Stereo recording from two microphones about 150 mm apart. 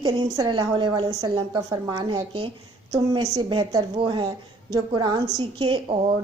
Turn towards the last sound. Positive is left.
turn(degrees=-35)  # may be behind; listen again after turning